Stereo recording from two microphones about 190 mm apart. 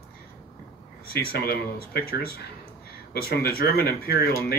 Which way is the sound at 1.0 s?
55° left (ahead or behind).